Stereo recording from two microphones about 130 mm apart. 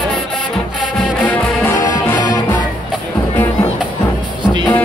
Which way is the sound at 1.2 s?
15° left (ahead or behind).